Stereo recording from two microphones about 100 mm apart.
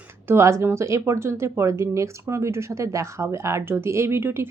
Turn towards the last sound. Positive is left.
turn(degrees=-25)  # may be behind; listen again after turning